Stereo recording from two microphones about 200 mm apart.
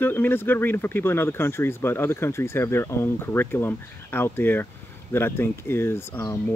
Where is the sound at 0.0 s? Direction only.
10° left (ahead or behind).